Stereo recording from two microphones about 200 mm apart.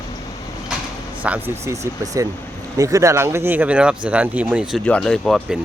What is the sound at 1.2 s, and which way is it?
Speech, 10° right (ahead or behind).